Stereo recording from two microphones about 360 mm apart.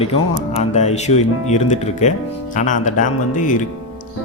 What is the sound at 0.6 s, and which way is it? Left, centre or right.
Speech, centre.